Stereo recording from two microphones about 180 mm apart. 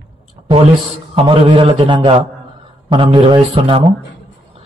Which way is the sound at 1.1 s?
30° right (ahead or behind).